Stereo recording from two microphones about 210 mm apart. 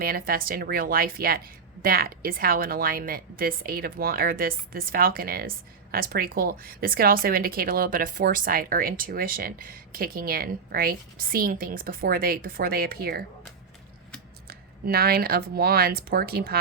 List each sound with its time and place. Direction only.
0.0 s a woman's voice: 45° right (ahead or behind)
14.4 s a woman's voice: 45° right (ahead or behind)